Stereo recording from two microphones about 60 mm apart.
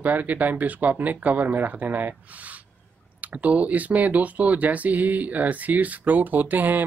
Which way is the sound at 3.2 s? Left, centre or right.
Right.